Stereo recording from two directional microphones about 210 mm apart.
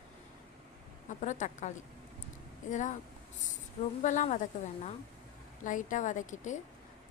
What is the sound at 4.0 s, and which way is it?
A woman's voice, 35° left (ahead or behind).